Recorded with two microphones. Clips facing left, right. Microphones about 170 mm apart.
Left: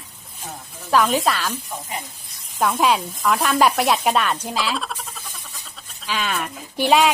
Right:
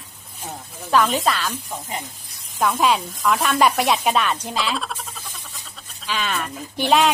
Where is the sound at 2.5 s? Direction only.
5° left (ahead or behind).